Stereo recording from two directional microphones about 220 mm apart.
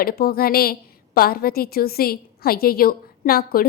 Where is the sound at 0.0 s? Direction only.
40° left (ahead or behind).